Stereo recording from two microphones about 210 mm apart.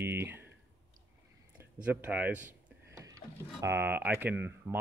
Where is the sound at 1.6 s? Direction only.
10° right (ahead or behind).